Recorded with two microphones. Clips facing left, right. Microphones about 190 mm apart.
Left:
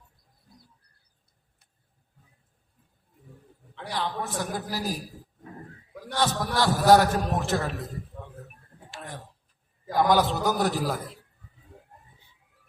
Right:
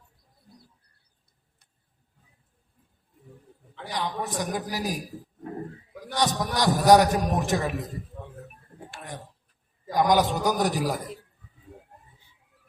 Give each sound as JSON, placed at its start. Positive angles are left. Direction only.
{"t": 3.9, "sound": "a man's voice", "side_deg": -15}
{"t": 6.1, "sound": "a man's voice", "side_deg": -15}
{"t": 9.9, "sound": "a man's voice", "side_deg": -15}